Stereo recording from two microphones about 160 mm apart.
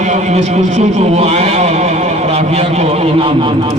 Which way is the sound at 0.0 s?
50° right (ahead or behind).